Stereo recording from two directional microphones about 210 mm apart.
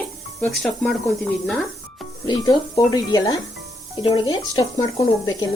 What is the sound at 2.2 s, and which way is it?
Speech, 20° left (ahead or behind).